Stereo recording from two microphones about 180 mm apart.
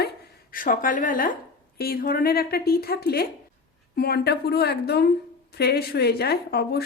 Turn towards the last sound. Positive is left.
turn(degrees=60)  # may be behind; listen again after turning